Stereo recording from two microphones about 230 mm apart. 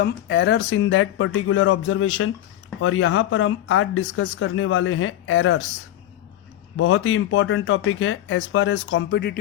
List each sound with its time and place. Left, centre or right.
0.0 s speech: left
6.7 s speech: left